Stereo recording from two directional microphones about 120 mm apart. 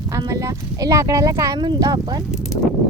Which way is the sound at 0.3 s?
25° right (ahead or behind).